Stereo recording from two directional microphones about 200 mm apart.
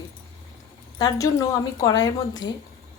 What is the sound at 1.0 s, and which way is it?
A woman's voice, 20° left (ahead or behind).